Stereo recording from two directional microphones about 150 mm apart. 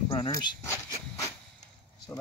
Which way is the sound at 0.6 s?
20° left (ahead or behind).